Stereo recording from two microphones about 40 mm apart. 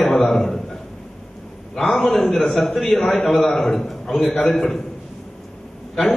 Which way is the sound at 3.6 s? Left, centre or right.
Left.